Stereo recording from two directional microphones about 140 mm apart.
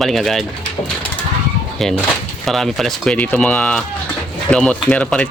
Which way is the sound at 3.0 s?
10° left (ahead or behind).